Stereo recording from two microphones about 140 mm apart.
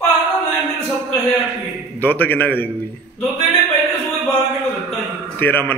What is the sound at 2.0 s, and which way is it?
Speech, 10° left (ahead or behind).